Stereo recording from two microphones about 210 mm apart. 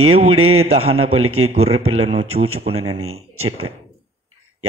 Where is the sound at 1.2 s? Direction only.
85° right.